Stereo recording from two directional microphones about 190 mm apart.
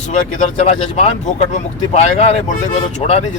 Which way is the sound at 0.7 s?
35° left (ahead or behind).